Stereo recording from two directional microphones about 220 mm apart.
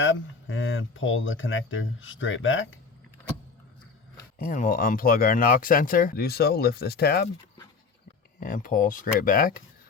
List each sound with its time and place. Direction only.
0.0 s speech: 65° left (ahead or behind)
4.4 s speech: 40° left (ahead or behind)
8.4 s speech: 40° left (ahead or behind)